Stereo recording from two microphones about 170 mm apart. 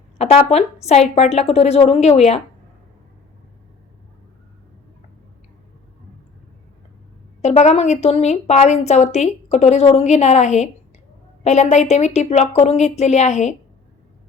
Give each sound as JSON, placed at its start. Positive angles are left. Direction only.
{"t": 0.2, "sound": "a woman's voice", "side_deg": 35}
{"t": 7.4, "sound": "a woman's voice", "side_deg": 40}